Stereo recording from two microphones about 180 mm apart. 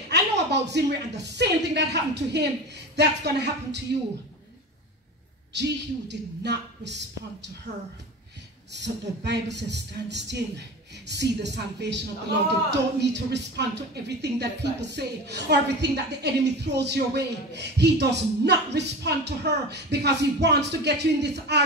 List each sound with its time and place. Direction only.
0.1 s a woman's voice: 70° right (ahead or behind)
5.5 s speech: 70° right (ahead or behind)
7.7 s a woman's voice: 40° right (ahead or behind)
8.7 s speech: 70° right (ahead or behind)